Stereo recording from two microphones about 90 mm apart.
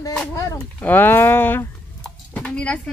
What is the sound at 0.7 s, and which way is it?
Speech, 20° left (ahead or behind).